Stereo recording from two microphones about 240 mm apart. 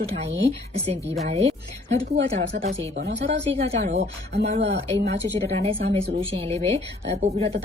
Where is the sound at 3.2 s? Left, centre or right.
Right.